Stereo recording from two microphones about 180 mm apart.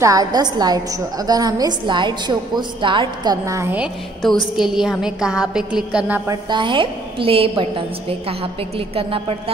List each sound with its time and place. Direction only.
0.0 s a woman's voice: 20° right (ahead or behind)
6.5 s a woman's voice: 25° right (ahead or behind)